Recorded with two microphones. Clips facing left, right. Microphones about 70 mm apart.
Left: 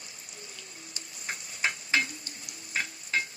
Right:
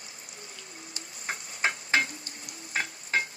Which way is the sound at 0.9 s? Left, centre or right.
Right.